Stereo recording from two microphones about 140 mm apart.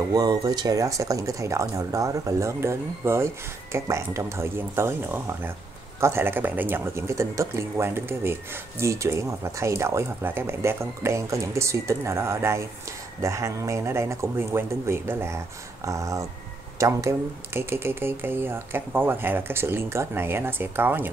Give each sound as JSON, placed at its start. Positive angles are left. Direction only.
{"t": 0.1, "sound": "speech", "side_deg": -30}